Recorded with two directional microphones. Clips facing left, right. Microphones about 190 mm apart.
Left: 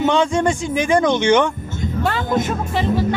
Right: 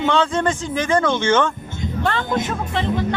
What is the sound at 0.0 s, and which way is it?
Speech, 15° left (ahead or behind).